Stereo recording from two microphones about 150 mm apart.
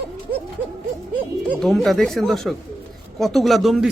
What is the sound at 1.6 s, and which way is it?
Speech, centre (ahead or behind).